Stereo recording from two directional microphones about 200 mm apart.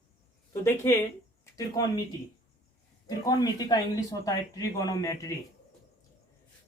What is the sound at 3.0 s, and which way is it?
A man's voice, 20° left (ahead or behind).